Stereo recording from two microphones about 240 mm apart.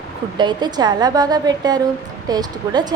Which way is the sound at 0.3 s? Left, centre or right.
Centre.